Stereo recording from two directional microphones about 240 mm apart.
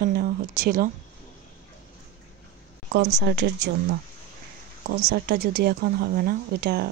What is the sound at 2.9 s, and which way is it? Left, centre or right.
Speech, right.